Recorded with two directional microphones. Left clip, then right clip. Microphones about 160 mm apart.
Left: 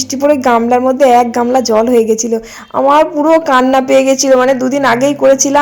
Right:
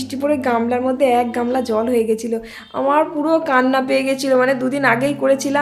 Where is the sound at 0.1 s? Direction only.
35° left (ahead or behind).